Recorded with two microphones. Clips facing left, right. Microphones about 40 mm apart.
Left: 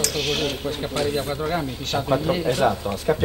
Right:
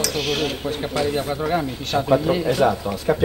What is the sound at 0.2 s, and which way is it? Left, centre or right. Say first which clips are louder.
Speech: right 1 dB; centre.